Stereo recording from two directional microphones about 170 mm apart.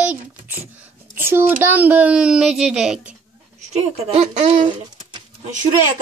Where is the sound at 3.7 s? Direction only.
40° right (ahead or behind).